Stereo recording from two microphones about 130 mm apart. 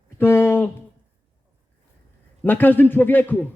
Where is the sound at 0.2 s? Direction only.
15° left (ahead or behind).